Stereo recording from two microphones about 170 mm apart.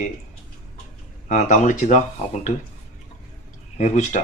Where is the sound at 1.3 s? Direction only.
50° left (ahead or behind).